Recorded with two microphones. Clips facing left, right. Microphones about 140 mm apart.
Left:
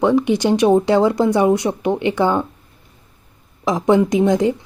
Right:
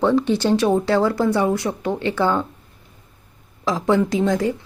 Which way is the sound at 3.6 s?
20° left (ahead or behind).